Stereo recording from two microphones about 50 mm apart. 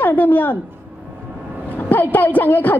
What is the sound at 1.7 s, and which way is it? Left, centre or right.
A woman's voice, left.